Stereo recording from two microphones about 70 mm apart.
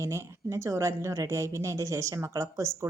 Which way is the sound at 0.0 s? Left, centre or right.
Right.